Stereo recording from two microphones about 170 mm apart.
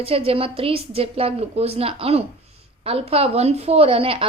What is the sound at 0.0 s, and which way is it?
A woman's voice, 35° right (ahead or behind).